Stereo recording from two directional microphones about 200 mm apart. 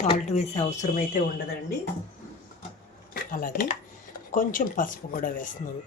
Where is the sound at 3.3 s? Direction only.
45° left (ahead or behind).